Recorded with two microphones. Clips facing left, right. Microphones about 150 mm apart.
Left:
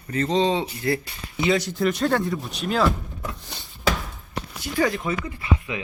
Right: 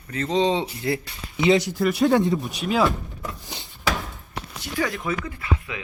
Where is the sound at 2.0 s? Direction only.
20° right (ahead or behind).